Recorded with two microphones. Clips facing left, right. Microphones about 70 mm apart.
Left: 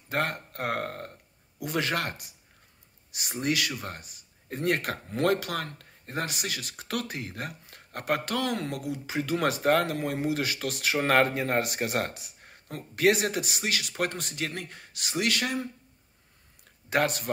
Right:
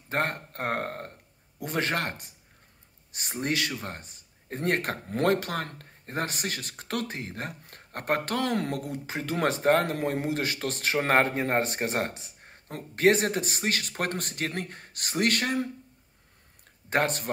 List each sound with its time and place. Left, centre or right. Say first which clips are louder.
0.1 s speech: right 1 dB; right
9.8 s speech: right 2 dB; right
10.2 s speech: even; right
16.9 s speech: even; right